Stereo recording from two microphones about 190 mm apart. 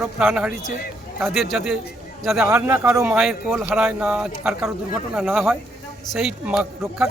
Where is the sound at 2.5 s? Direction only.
10° right (ahead or behind).